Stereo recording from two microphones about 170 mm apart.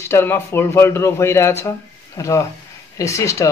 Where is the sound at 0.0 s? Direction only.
15° left (ahead or behind).